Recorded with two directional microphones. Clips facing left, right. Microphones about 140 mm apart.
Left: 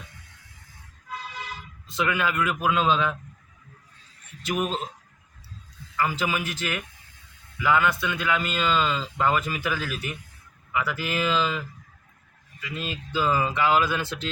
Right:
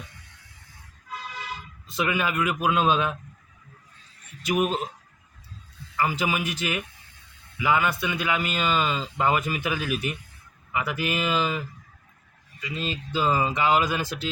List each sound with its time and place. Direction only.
1.9 s a man's voice: 15° right (ahead or behind)
4.4 s a man's voice: 15° right (ahead or behind)
6.0 s a man's voice: 15° right (ahead or behind)
12.7 s a man's voice: 20° right (ahead or behind)